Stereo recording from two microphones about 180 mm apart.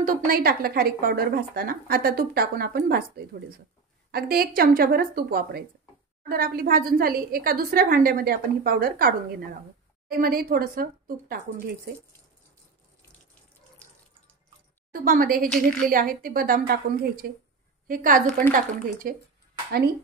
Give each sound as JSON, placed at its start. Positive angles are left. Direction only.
{"t": 0.0, "sound": "speech", "side_deg": -55}
{"t": 14.9, "sound": "a woman's voice", "side_deg": -55}